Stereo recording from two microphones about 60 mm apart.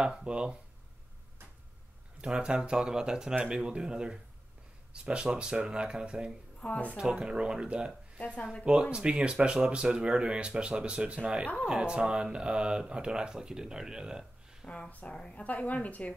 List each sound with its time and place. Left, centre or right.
0.0 s speech: centre
2.2 s speech: centre
6.6 s a woman's voice: left
7.0 s speech: centre
8.2 s speech: centre
8.9 s speech: centre
14.7 s a woman's voice: left
15.4 s a woman's voice: left